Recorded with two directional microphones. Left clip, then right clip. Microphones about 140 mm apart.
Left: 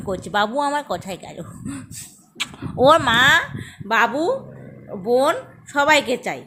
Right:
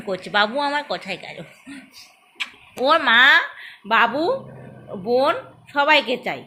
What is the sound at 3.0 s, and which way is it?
Speech, 35° left (ahead or behind).